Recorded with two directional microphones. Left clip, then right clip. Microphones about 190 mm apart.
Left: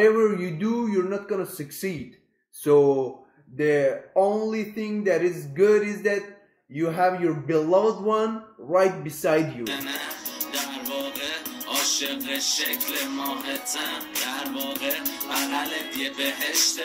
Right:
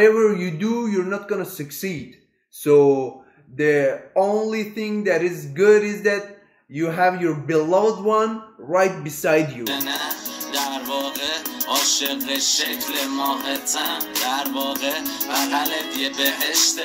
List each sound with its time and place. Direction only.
0.0 s a man's voice: 10° right (ahead or behind)
2.6 s music: 5° right (ahead or behind)
3.5 s a man's voice: 10° right (ahead or behind)
9.6 s music: 5° left (ahead or behind)